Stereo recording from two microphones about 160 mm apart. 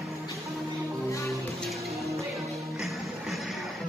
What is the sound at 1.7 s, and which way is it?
Music, centre (ahead or behind).